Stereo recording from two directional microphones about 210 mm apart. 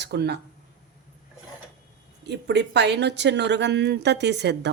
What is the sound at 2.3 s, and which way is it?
A woman's voice, 55° right (ahead or behind).